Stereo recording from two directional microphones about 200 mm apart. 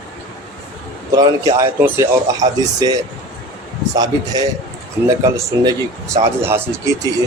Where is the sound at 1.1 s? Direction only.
15° right (ahead or behind).